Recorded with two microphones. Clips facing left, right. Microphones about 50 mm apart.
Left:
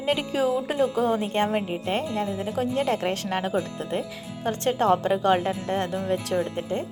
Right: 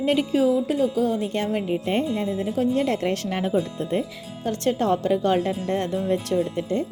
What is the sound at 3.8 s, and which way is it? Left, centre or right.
Speech, centre.